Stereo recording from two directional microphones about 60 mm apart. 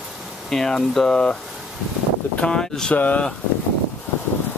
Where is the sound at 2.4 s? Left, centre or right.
Centre.